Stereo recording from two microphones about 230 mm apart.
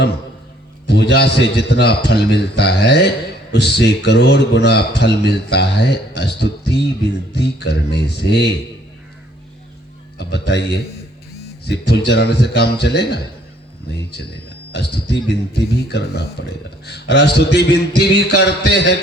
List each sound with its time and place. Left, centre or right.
0.9 s a man's voice: left
10.2 s speech: left
11.6 s speech: left
14.7 s speech: left